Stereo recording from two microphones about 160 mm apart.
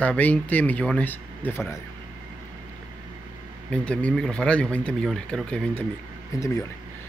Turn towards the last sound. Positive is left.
turn(degrees=20)  # may be behind; listen again after turning